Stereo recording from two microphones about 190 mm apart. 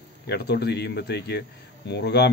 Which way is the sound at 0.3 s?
60° left (ahead or behind).